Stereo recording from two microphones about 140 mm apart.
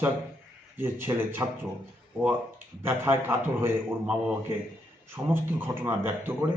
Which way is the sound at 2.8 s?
15° right (ahead or behind).